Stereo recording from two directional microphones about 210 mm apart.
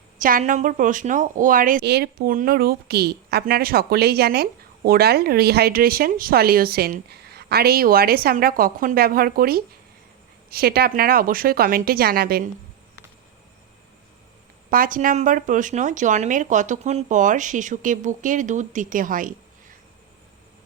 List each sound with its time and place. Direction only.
0.2 s speech: 40° right (ahead or behind)
14.7 s speech: 40° right (ahead or behind)